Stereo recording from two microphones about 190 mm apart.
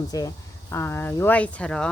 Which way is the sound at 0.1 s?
20° left (ahead or behind).